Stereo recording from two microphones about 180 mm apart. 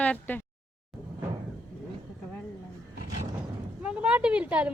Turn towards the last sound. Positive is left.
turn(degrees=-5)  # may be behind; listen again after turning